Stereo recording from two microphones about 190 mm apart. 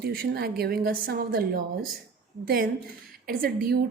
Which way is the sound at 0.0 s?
55° right (ahead or behind).